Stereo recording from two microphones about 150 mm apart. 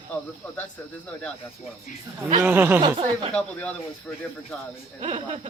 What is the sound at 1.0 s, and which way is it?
Speech, 5° left (ahead or behind).